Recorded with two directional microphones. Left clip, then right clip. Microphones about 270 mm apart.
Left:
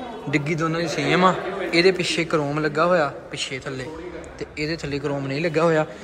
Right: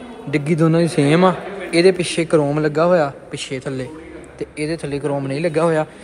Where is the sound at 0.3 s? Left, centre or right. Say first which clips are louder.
Right 6 dB; centre.